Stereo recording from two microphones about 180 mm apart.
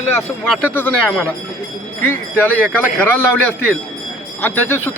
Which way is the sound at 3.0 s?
10° left (ahead or behind).